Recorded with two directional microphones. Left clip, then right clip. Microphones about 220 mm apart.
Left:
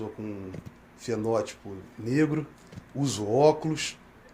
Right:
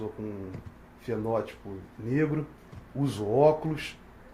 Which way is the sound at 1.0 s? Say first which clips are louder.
Left 2 dB; 45° left (ahead or behind).